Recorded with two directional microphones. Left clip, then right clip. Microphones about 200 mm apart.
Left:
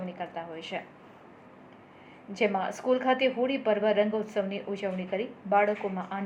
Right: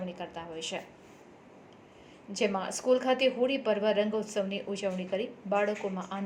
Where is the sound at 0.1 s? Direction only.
30° right (ahead or behind).